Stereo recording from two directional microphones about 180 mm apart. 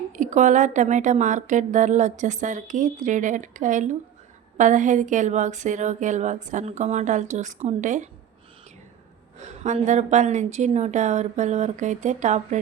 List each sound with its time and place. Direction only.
0.1 s a woman's voice: 45° right (ahead or behind)
9.6 s a woman's voice: 40° right (ahead or behind)